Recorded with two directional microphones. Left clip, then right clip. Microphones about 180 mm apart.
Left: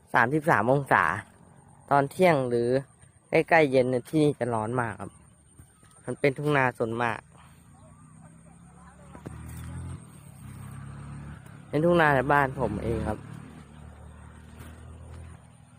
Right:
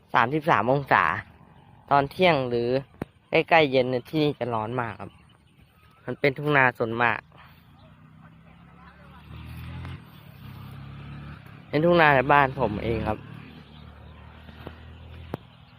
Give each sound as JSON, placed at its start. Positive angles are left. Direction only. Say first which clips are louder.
{"t": 0.1, "sound": "speech", "louder": "right 1 dB", "side_deg": 20}
{"t": 6.1, "sound": "speech", "louder": "right 2 dB", "side_deg": 5}
{"t": 11.7, "sound": "speech", "louder": "right 3 dB", "side_deg": 0}